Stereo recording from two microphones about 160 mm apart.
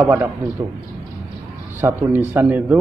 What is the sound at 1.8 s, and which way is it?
Speech, 15° right (ahead or behind).